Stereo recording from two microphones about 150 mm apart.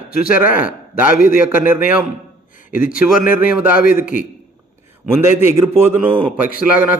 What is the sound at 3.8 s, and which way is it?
Speech, 65° left (ahead or behind).